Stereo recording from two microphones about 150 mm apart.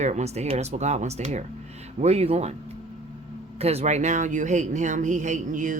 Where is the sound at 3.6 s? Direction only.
45° right (ahead or behind).